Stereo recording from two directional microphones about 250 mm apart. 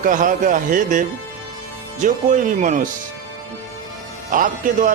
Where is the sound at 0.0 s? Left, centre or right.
Right.